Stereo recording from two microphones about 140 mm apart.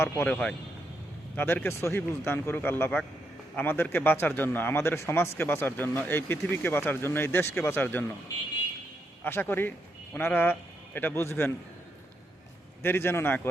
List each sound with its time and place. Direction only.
0.0 s speech: 15° left (ahead or behind)
9.2 s speech: 15° left (ahead or behind)
12.8 s speech: 15° left (ahead or behind)